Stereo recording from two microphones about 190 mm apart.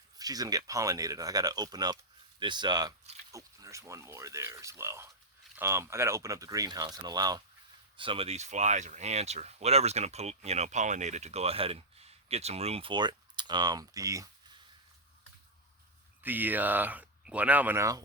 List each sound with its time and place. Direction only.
0.2 s speech: 20° right (ahead or behind)
16.2 s speech: 10° right (ahead or behind)